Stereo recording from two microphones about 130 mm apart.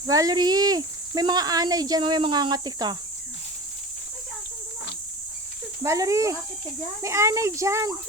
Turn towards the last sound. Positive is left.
turn(degrees=-20)  # may be behind; listen again after turning